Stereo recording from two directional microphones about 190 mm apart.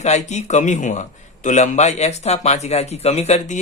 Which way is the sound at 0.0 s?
35° left (ahead or behind).